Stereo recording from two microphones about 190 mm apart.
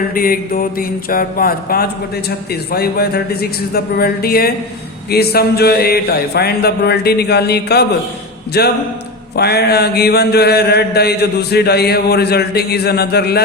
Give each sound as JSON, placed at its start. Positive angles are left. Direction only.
{"t": 0.1, "sound": "mantra", "side_deg": 50}